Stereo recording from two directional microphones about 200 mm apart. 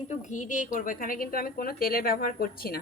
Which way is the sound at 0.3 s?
40° left (ahead or behind).